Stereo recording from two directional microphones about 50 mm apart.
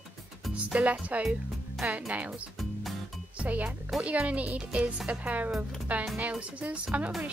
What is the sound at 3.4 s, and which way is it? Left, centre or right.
Speech, right.